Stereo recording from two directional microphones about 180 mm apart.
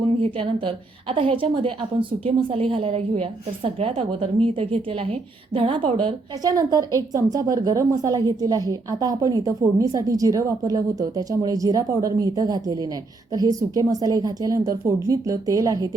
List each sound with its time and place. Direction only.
0.0 s a woman's voice: 30° right (ahead or behind)